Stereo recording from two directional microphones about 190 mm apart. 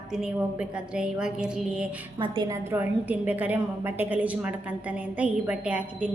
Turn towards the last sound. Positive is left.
turn(degrees=-5)  # may be behind; listen again after turning